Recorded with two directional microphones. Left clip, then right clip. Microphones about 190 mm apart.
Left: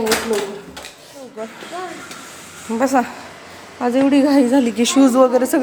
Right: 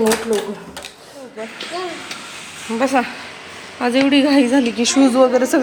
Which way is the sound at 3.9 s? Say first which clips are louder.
Even; 5° left (ahead or behind).